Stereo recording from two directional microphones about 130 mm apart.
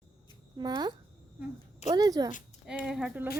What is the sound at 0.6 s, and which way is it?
A child's voice, 35° right (ahead or behind).